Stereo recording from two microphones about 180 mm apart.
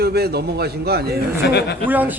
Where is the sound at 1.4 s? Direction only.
65° left (ahead or behind).